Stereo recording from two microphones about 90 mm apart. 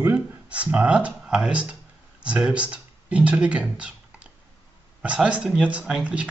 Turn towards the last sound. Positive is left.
turn(degrees=-10)  # may be behind; listen again after turning